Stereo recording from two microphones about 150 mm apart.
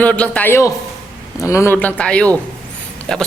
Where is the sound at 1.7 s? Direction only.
5° left (ahead or behind).